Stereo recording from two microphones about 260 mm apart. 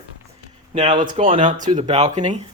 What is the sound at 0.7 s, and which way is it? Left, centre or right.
Speech, right.